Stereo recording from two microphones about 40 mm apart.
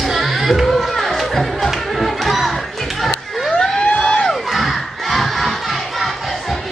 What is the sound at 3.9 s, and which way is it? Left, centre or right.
Music, left.